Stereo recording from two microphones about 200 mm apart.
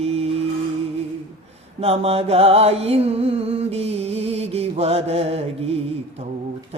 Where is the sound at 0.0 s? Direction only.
30° right (ahead or behind).